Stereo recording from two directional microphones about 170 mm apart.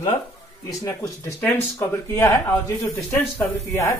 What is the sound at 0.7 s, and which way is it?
Speech, 20° left (ahead or behind).